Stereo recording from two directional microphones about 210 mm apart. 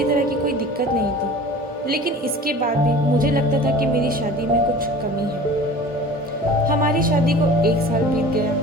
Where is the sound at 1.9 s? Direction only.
45° right (ahead or behind).